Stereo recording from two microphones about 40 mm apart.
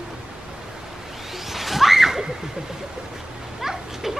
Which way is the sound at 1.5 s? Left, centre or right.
Centre.